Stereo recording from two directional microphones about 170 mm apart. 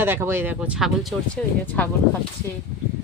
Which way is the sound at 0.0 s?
15° right (ahead or behind).